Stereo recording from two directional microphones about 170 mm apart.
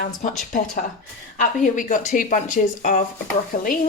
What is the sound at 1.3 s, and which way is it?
Speech, 50° left (ahead or behind).